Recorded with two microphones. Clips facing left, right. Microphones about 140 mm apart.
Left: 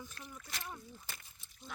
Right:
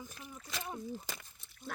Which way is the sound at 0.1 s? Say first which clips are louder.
Right 2 dB; 10° right (ahead or behind).